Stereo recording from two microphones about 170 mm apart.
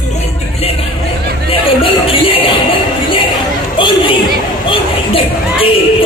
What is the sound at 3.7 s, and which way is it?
Chatter, 30° left (ahead or behind).